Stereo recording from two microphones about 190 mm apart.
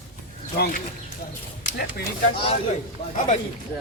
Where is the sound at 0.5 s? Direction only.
55° left (ahead or behind).